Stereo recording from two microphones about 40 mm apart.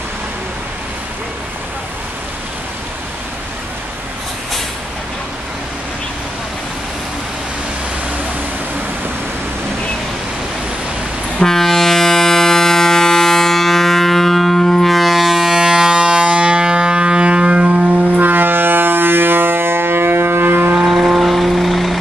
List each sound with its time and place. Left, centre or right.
11.3 s ship: centre; by 17.8 s right
17.8 s a sound: right
20.8 s music: centre